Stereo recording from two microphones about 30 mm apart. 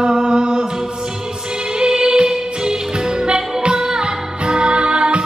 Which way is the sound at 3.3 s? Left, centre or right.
Right.